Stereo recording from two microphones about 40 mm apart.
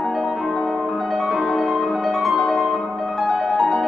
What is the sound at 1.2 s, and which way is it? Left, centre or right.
Music, centre.